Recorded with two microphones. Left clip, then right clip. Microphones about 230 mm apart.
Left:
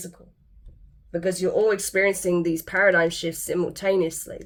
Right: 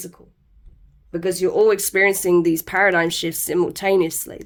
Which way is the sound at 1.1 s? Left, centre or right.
Right.